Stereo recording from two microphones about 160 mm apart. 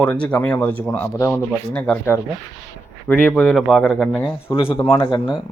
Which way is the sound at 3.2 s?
10° left (ahead or behind).